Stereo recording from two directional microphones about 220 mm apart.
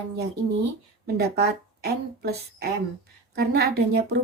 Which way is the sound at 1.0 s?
45° right (ahead or behind).